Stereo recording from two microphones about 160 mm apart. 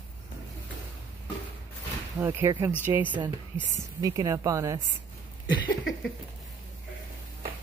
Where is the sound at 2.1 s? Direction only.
15° right (ahead or behind).